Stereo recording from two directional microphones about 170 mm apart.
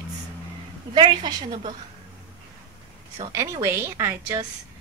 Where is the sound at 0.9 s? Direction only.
25° right (ahead or behind).